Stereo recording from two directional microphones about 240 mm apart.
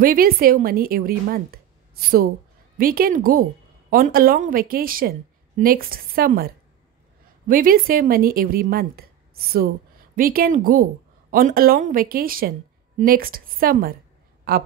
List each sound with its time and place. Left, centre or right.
0.0 s a woman's voice: right